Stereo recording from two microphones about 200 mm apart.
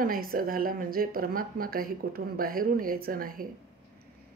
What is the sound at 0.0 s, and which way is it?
Speech, 45° right (ahead or behind).